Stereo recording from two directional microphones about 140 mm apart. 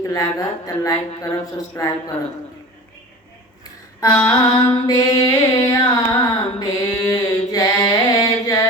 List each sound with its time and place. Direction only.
0.0 s speech: 25° left (ahead or behind)
4.0 s speech: 20° left (ahead or behind)
6.6 s a sound: 25° left (ahead or behind)